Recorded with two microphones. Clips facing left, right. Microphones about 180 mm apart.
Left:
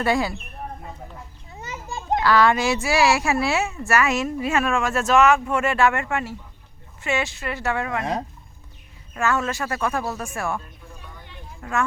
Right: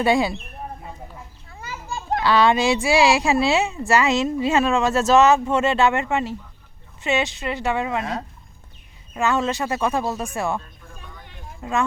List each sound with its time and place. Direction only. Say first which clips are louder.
0.0 s speech: right 3 dB; 20° right (ahead or behind)
1.5 s children playing: right 1 dB; 20° left (ahead or behind)
2.2 s speech: right 1 dB; 20° right (ahead or behind)
9.1 s speech: right 2 dB; 20° right (ahead or behind)
11.6 s speech: right 2 dB; 20° right (ahead or behind)